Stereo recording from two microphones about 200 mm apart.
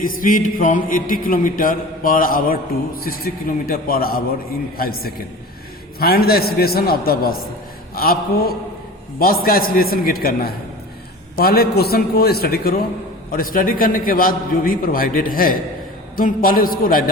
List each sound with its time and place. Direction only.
0.2 s speech: 45° left (ahead or behind)